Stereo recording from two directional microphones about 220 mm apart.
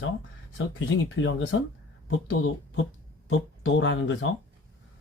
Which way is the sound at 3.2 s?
60° left (ahead or behind).